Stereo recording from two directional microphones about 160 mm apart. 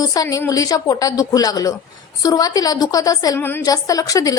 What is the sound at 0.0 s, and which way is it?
A woman's voice, 25° left (ahead or behind).